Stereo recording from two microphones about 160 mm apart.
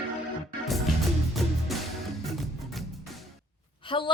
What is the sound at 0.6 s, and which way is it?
Music, centre (ahead or behind).